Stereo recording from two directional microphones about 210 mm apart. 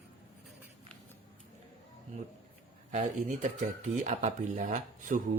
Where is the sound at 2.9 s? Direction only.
35° right (ahead or behind).